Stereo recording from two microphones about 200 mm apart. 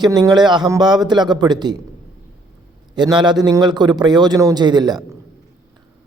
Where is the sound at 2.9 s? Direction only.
20° right (ahead or behind).